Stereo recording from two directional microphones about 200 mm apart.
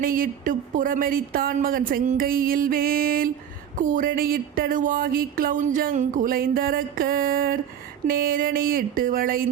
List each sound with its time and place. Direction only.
0.0 s speech: 45° right (ahead or behind)